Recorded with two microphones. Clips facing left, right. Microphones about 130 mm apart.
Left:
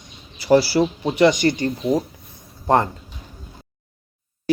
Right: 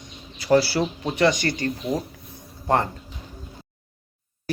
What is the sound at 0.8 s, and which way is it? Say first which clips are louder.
Speech: left 5 dB; 15° left (ahead or behind).